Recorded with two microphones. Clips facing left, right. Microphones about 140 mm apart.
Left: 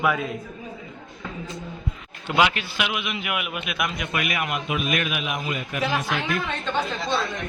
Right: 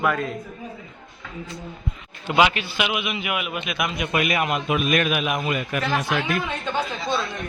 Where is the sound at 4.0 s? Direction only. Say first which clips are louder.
Right 4 dB; 25° right (ahead or behind).